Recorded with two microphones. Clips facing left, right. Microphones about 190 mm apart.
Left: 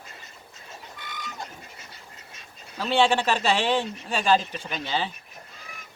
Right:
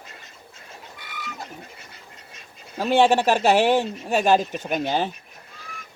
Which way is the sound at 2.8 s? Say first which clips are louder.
Right 4 dB; 45° right (ahead or behind).